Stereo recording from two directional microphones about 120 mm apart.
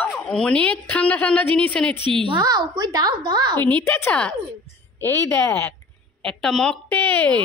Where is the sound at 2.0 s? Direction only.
45° right (ahead or behind).